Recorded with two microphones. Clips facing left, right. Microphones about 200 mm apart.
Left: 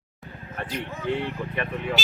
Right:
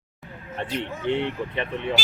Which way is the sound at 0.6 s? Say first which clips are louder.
Right 3 dB; 25° right (ahead or behind).